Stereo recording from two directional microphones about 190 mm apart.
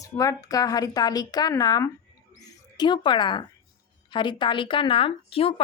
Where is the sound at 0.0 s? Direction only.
15° left (ahead or behind).